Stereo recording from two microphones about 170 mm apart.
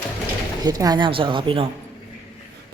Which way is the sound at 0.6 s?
20° right (ahead or behind).